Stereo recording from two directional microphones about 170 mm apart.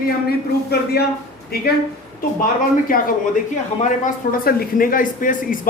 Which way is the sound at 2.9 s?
55° left (ahead or behind).